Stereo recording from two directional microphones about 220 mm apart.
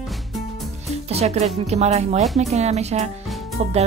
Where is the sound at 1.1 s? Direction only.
30° right (ahead or behind).